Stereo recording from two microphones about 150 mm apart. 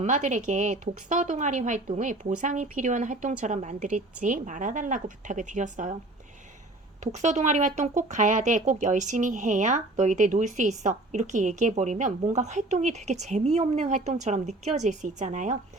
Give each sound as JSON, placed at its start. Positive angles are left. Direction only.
{"t": 0.0, "sound": "speech", "side_deg": -50}
{"t": 7.0, "sound": "speech", "side_deg": -50}